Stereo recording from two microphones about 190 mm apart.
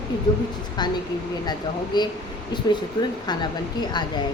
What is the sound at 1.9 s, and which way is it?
A woman's voice, 20° left (ahead or behind).